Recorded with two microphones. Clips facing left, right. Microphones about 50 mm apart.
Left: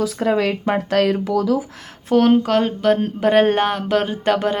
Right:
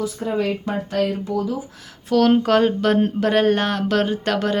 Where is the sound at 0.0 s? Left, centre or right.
Left.